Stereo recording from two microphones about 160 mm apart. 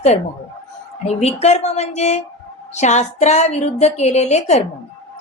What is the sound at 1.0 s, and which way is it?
A woman's voice, 45° left (ahead or behind).